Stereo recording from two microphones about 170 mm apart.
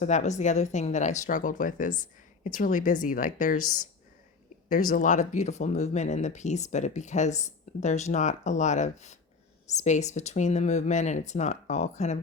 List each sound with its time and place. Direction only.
0.0 s speech: 45° left (ahead or behind)
4.7 s speech: 50° left (ahead or behind)